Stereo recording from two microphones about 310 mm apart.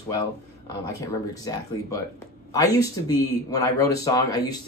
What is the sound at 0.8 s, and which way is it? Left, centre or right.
Speech, centre.